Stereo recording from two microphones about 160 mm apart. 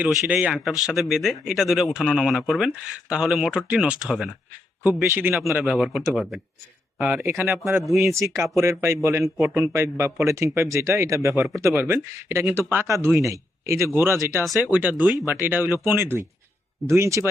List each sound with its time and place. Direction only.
0.0 s speech: 5° right (ahead or behind)
4.8 s speech: 15° right (ahead or behind)
5.3 s speech: centre (ahead or behind)
7.4 s speech: centre (ahead or behind)
8.0 s speech: 20° right (ahead or behind)
14.9 s speech: 25° left (ahead or behind)
15.3 s speech: 10° right (ahead or behind)